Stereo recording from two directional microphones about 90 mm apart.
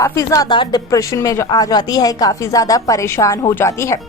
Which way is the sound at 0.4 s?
55° left (ahead or behind).